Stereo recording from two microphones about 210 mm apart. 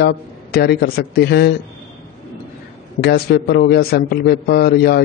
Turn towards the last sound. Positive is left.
turn(degrees=50)  # may be behind; listen again after turning